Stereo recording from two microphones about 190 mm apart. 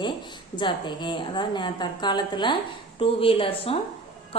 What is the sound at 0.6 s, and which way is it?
A woman's voice, 25° left (ahead or behind).